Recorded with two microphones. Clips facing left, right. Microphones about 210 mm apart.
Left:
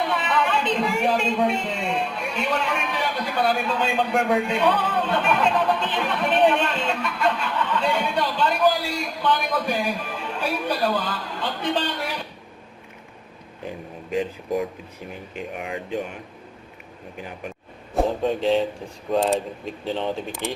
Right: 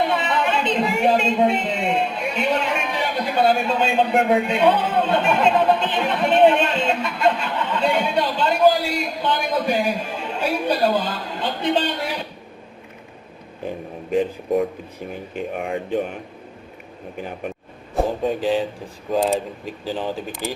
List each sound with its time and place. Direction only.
0.1 s a woman's voice: 25° right (ahead or behind)
14.1 s speech: 50° right (ahead or behind)
17.9 s speech: centre (ahead or behind)